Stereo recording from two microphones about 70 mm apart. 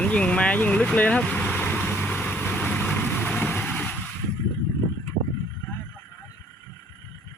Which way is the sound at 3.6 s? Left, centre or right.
Left.